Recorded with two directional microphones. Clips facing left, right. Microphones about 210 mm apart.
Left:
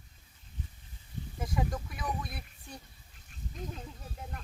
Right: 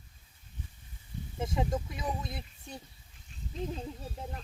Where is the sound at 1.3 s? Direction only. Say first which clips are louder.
Right 3 dB; 25° right (ahead or behind).